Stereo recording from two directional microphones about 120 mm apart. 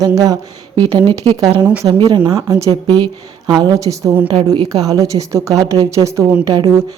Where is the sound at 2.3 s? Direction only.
30° right (ahead or behind).